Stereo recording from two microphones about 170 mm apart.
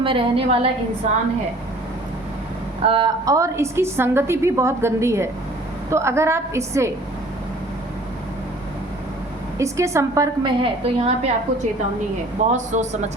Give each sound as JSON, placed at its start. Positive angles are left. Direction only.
{"t": 0.0, "sound": "a woman's voice", "side_deg": -30}
{"t": 2.8, "sound": "a woman's voice", "side_deg": -30}
{"t": 3.2, "sound": "a woman's voice", "side_deg": -20}
{"t": 9.6, "sound": "a woman's voice", "side_deg": -15}
{"t": 10.4, "sound": "a woman's voice", "side_deg": -35}
{"t": 12.5, "sound": "speech", "side_deg": -45}